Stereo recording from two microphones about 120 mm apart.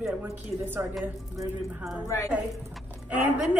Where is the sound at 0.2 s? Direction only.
15° right (ahead or behind).